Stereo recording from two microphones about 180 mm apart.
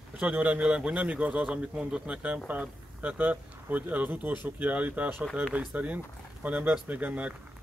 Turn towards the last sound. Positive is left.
turn(degrees=-10)  # may be behind; listen again after turning